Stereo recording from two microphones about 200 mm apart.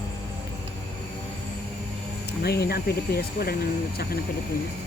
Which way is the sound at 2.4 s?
55° left (ahead or behind).